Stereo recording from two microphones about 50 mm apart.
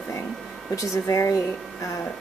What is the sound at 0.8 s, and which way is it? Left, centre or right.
Speech, left.